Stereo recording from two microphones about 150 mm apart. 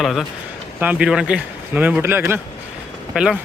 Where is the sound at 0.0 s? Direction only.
Centre (ahead or behind).